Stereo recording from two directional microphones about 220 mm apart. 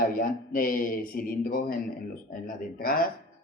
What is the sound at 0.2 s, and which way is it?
Speech, 40° left (ahead or behind).